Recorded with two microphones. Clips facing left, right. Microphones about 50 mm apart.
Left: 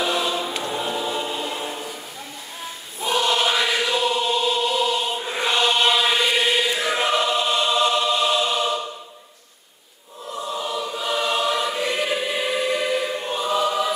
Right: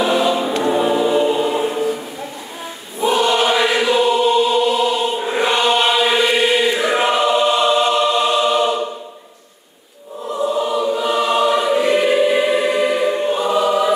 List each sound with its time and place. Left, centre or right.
0.0 s choir: centre
3.0 s choir: centre
5.2 s chant: centre
10.6 s choir: centre